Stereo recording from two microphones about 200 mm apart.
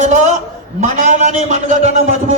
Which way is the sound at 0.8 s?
35° right (ahead or behind).